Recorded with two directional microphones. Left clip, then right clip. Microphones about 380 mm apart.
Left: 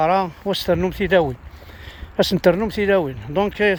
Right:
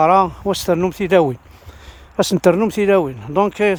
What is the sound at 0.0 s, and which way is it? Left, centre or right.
Speech, centre.